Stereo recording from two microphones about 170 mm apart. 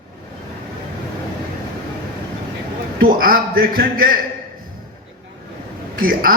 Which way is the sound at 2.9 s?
55° right (ahead or behind).